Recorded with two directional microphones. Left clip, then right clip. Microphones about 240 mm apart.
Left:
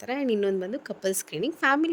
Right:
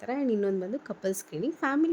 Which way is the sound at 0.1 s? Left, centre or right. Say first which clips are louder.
Left 3 dB; left.